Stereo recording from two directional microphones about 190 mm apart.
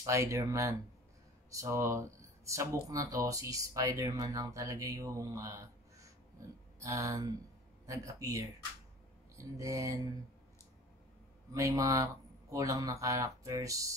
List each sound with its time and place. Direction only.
0.0 s speech: 15° right (ahead or behind)
11.5 s speech: 15° right (ahead or behind)